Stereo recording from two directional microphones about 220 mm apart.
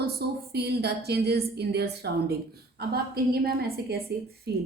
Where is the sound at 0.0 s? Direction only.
45° right (ahead or behind).